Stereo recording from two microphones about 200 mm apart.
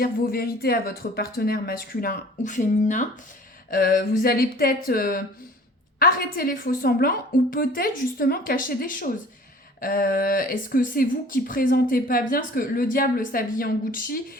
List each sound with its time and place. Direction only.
0.0 s a woman's voice: 50° left (ahead or behind)